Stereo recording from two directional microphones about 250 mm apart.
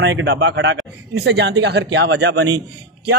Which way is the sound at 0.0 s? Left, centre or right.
Right.